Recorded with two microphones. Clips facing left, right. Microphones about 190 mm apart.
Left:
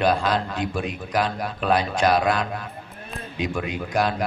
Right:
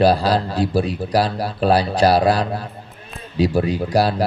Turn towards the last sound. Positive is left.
turn(degrees=-35)  # may be behind; listen again after turning